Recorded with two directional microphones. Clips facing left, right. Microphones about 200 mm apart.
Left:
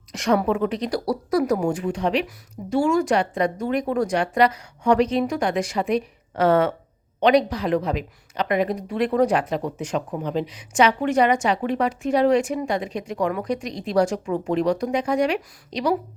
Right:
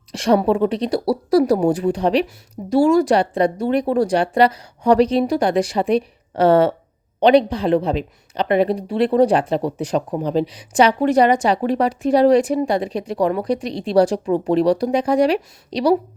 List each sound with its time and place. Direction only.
0.1 s a woman's voice: 30° right (ahead or behind)